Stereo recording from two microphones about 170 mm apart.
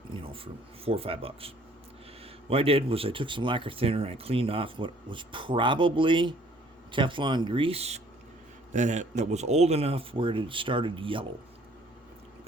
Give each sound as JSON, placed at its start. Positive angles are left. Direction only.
{"t": 0.1, "sound": "speech", "side_deg": -30}